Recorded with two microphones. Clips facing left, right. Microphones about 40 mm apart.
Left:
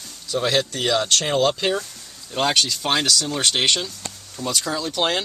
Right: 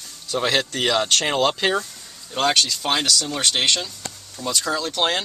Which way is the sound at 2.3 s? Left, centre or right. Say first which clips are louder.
Right 1 dB; centre.